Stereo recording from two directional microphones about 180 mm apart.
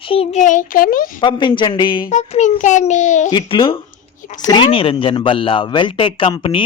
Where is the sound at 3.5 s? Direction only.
30° left (ahead or behind).